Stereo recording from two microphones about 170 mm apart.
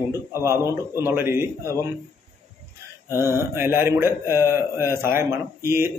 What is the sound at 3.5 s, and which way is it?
A man's voice, 15° right (ahead or behind).